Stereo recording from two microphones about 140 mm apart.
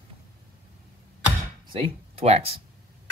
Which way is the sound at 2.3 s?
50° right (ahead or behind).